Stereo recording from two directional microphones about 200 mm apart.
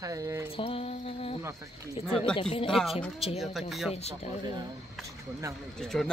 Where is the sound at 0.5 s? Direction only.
30° left (ahead or behind).